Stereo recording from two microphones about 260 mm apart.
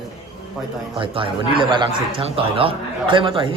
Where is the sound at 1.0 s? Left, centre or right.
Centre.